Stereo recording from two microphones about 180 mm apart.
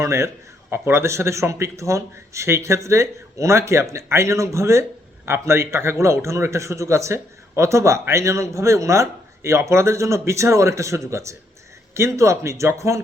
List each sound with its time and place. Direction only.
0.0 s speech: 15° right (ahead or behind)